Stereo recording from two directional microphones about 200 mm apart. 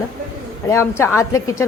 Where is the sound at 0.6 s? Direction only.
15° left (ahead or behind).